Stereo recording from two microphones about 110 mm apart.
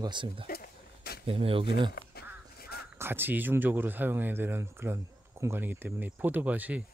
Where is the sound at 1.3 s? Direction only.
55° right (ahead or behind).